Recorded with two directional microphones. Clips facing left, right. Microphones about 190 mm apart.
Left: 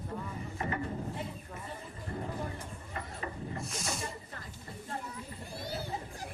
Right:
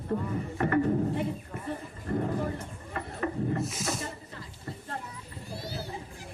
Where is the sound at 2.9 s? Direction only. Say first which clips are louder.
Right 9 dB; 60° right (ahead or behind).